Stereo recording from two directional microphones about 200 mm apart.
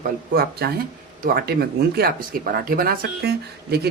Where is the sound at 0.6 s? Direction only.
50° right (ahead or behind).